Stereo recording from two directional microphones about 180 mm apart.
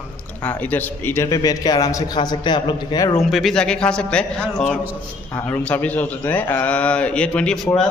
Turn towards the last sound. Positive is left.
turn(degrees=5)  # may be behind; listen again after turning